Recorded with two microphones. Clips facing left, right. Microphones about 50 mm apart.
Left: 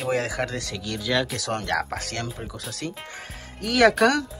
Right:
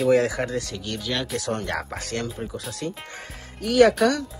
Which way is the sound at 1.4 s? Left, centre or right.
Left.